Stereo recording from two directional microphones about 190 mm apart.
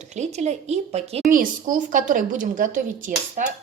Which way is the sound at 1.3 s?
45° right (ahead or behind).